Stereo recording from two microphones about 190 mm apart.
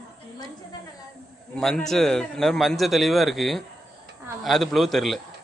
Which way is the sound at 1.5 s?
5° left (ahead or behind).